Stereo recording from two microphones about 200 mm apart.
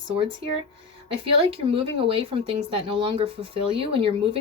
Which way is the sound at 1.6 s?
25° right (ahead or behind).